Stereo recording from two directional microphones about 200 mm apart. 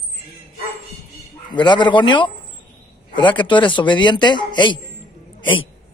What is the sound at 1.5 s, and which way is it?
Speech, 20° left (ahead or behind).